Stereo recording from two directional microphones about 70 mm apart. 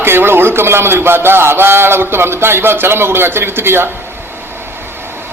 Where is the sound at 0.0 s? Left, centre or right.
Right.